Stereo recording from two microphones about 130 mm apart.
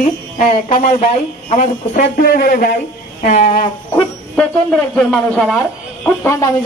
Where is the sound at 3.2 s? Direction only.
60° left (ahead or behind).